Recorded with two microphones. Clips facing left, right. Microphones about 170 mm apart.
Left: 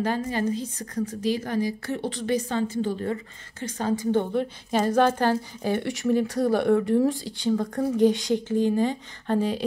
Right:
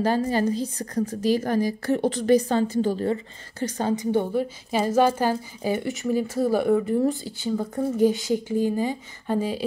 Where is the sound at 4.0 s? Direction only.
10° right (ahead or behind).